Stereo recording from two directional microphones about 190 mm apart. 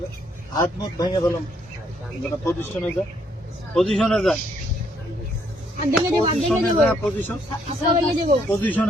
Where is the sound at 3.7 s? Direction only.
Centre (ahead or behind).